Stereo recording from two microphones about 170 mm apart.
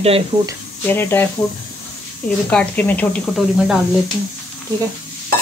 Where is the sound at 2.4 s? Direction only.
10° left (ahead or behind).